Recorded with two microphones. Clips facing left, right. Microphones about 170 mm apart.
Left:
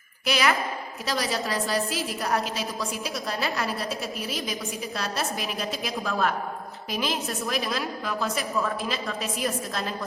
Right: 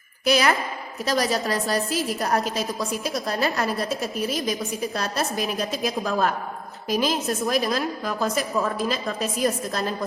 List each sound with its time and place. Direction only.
0.3 s a woman's voice: 40° right (ahead or behind)